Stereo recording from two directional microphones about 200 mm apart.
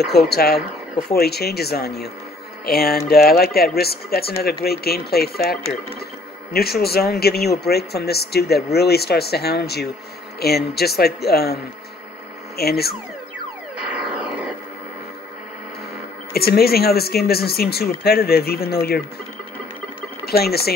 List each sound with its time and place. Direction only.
0.0 s speech: 55° left (ahead or behind)
12.5 s speech: 50° left (ahead or behind)
16.3 s speech: 50° left (ahead or behind)
20.2 s speech: 50° left (ahead or behind)